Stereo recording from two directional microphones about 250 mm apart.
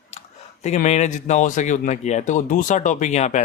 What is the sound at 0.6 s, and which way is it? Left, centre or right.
Speech, left.